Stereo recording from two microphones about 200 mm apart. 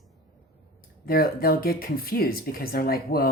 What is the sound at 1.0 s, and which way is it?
Speech, 45° left (ahead or behind).